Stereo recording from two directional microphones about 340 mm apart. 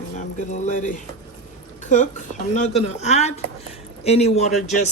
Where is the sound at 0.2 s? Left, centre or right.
Left.